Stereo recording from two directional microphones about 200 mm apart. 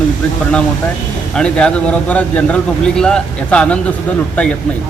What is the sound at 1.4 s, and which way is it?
Speech, 5° left (ahead or behind).